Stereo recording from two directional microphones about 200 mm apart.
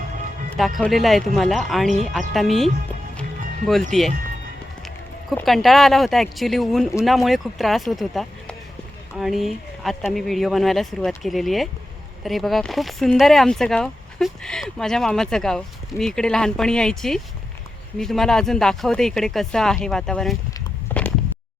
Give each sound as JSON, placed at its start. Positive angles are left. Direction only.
{"t": 0.8, "sound": "speech", "side_deg": 0}
{"t": 3.9, "sound": "speech", "side_deg": 0}
{"t": 5.3, "sound": "speech", "side_deg": 0}
{"t": 20.9, "sound": "a sound", "side_deg": 10}